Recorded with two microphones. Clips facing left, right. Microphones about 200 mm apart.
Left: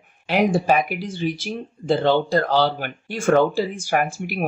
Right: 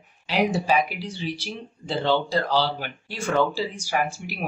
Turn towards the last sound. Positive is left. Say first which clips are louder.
# left 4 dB
turn(degrees=50)  # may be behind; listen again after turning